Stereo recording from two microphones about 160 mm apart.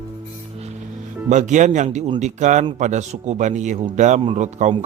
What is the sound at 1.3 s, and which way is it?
A man's voice, 50° right (ahead or behind).